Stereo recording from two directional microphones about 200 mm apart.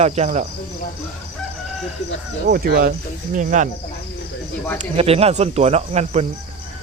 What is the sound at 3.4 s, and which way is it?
Speech, 40° right (ahead or behind).